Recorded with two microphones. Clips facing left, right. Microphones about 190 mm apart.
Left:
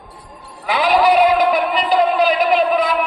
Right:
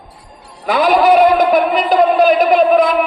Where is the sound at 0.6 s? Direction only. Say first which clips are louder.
Right 3 dB; 45° right (ahead or behind).